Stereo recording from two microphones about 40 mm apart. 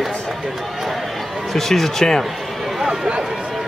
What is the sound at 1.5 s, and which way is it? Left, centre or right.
Speech, centre.